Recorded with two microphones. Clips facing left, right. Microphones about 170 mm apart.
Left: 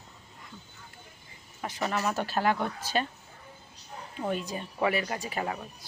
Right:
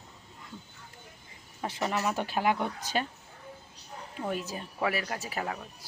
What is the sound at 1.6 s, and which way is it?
Speech, 25° right (ahead or behind).